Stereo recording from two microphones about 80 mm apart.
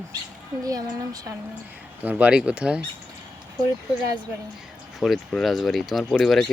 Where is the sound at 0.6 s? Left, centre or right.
Right.